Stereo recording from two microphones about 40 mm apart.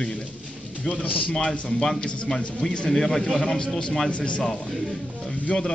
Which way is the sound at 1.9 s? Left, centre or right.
Left.